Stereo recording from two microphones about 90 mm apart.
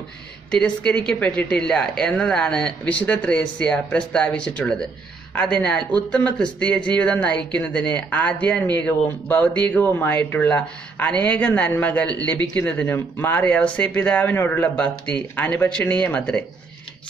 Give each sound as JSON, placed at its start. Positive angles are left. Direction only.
{"t": 0.5, "sound": "speech", "side_deg": 10}
{"t": 14.8, "sound": "speech", "side_deg": 10}